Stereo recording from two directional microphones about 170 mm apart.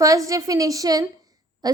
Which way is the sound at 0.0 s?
20° right (ahead or behind).